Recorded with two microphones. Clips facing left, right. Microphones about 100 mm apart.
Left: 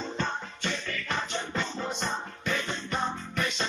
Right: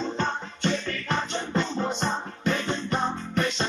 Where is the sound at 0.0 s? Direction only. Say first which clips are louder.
Right 4 dB; 30° right (ahead or behind).